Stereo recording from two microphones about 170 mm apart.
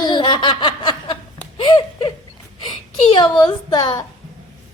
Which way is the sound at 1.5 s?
25° left (ahead or behind).